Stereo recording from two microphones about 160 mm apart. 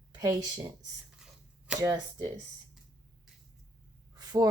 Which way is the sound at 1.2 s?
5° right (ahead or behind).